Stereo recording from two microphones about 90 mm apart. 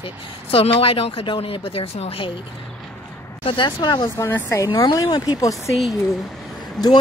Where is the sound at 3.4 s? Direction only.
75° left (ahead or behind).